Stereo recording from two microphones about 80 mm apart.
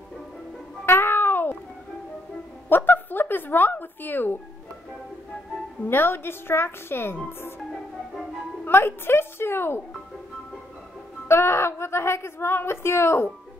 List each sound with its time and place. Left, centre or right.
0.8 s cat: left
2.7 s a woman's voice: left
5.9 s a woman's voice: left
8.6 s a woman's voice: left
11.2 s a woman's voice: left